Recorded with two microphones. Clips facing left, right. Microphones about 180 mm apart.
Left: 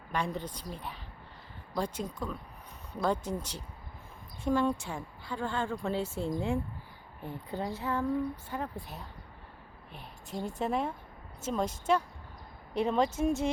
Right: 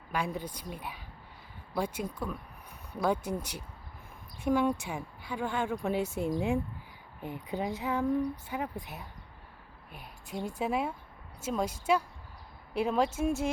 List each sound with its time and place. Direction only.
0.1 s speech: 10° right (ahead or behind)
10.4 s speech: 10° right (ahead or behind)